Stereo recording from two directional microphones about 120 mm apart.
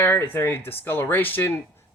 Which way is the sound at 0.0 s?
20° left (ahead or behind).